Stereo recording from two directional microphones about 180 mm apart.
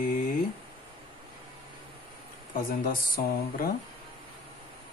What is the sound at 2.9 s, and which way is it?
Speech, 55° left (ahead or behind).